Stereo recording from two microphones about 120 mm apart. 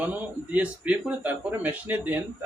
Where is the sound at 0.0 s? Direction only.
15° right (ahead or behind).